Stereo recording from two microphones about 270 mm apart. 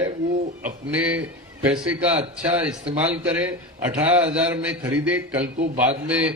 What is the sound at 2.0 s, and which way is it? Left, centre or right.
A man's voice, right.